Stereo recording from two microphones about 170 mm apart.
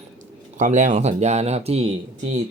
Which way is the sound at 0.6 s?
45° right (ahead or behind).